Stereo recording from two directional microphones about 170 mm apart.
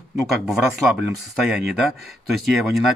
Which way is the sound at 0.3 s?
Centre (ahead or behind).